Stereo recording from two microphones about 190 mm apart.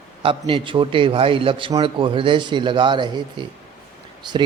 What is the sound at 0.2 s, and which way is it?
A man's voice, 25° right (ahead or behind).